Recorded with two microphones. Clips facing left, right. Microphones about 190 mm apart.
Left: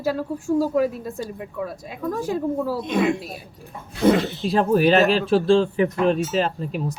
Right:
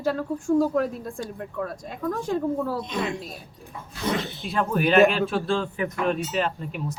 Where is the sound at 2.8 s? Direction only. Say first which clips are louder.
Left 8 dB; 55° left (ahead or behind).